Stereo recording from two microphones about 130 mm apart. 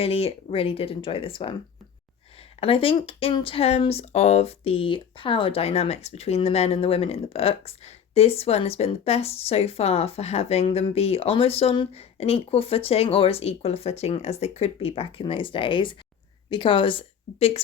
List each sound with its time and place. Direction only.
0.0 s speech: 50° left (ahead or behind)
2.6 s speech: 45° left (ahead or behind)